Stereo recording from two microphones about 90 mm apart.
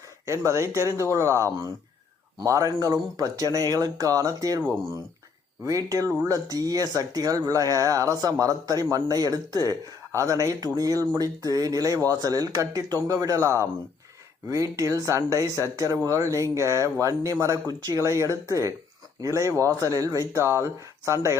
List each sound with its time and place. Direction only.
0.3 s speech: 35° right (ahead or behind)
5.6 s speech: 40° right (ahead or behind)